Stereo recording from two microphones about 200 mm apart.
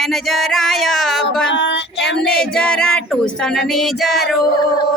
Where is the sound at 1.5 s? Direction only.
65° left (ahead or behind).